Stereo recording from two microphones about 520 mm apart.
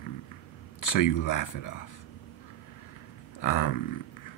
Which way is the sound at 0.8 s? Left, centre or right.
Left.